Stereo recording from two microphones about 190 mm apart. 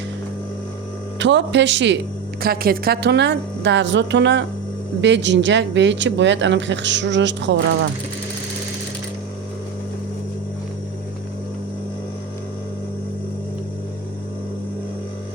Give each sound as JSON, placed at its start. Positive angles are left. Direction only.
{"t": 1.2, "sound": "speech", "side_deg": -70}
{"t": 2.4, "sound": "a woman's voice", "side_deg": -50}